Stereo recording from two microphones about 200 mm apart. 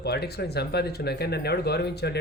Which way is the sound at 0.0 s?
55° left (ahead or behind).